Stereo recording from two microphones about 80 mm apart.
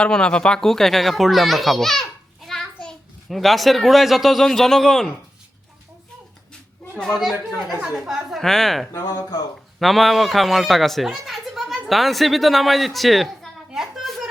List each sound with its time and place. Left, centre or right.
0.0 s a child's voice: centre
7.0 s a child's voice: centre
8.9 s speech: left
9.8 s a child's voice: centre
13.7 s a sound: centre